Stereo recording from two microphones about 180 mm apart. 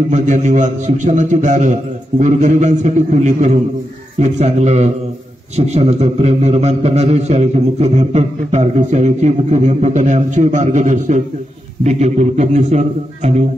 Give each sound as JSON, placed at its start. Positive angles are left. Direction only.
{"t": 0.1, "sound": "a man's voice", "side_deg": -40}